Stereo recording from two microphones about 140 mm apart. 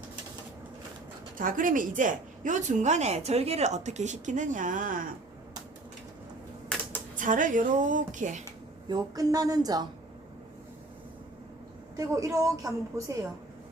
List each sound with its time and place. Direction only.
1.4 s a woman's voice: 75° right (ahead or behind)
7.2 s a woman's voice: 70° right (ahead or behind)
8.9 s a woman's voice: 25° right (ahead or behind)
11.9 s a woman's voice: 25° right (ahead or behind)